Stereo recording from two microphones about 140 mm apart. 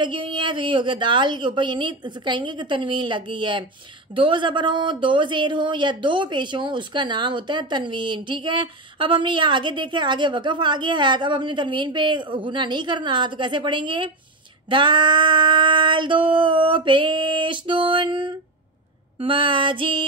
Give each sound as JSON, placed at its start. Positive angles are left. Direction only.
{"t": 0.0, "sound": "speech", "side_deg": -35}